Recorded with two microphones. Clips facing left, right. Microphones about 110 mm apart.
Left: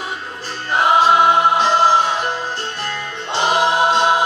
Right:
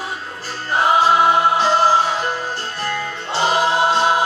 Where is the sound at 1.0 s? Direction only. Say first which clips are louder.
Left 2 dB; 20° left (ahead or behind).